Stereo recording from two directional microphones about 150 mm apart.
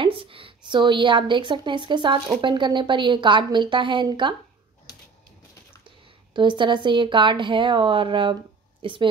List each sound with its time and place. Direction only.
0.0 s a woman's voice: 35° right (ahead or behind)
6.3 s a woman's voice: 30° right (ahead or behind)